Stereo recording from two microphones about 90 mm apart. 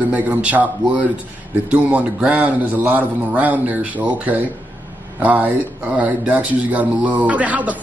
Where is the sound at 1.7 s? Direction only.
15° right (ahead or behind).